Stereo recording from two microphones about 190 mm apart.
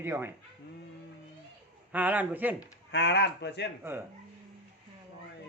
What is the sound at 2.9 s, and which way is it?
Speech, 65° left (ahead or behind).